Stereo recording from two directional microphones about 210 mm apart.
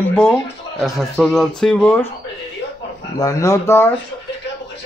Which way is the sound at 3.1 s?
15° left (ahead or behind).